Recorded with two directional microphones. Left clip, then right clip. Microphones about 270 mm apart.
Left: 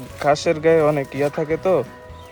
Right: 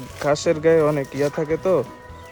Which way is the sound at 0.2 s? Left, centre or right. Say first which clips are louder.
Left 2 dB; centre.